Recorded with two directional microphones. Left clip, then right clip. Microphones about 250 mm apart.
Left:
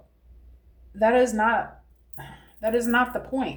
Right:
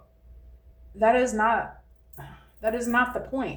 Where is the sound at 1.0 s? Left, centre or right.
Left.